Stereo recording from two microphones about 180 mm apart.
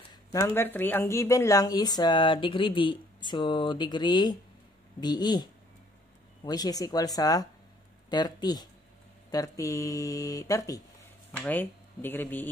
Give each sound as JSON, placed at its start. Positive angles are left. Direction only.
{"t": 0.1, "sound": "speech", "side_deg": 15}